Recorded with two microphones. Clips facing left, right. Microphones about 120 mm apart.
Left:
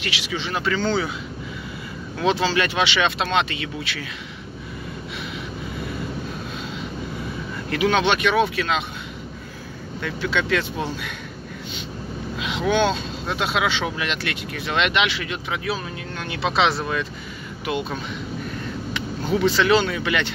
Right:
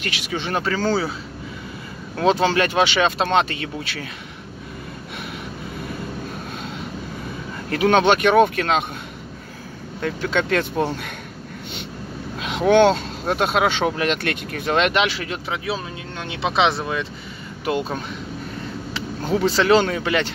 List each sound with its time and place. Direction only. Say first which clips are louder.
0.0 s speech: right 1 dB; 45° right (ahead or behind)
2.1 s speech: right 3 dB; 45° right (ahead or behind)
7.7 s speech: right 4 dB; 45° right (ahead or behind)
10.0 s speech: right 2 dB; 40° right (ahead or behind)
12.4 s speech: right 6 dB; 50° right (ahead or behind)
13.2 s speech: right 4 dB; 45° right (ahead or behind); by 17.1 s 20° right (ahead or behind)
17.6 s speech: right 3 dB; 40° right (ahead or behind)